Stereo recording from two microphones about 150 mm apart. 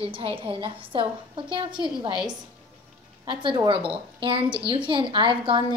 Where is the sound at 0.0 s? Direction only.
40° right (ahead or behind).